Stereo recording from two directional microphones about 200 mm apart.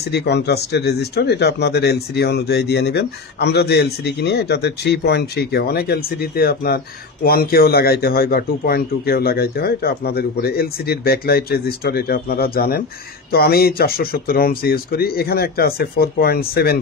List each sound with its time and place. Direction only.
0.1 s a man's voice: 55° left (ahead or behind)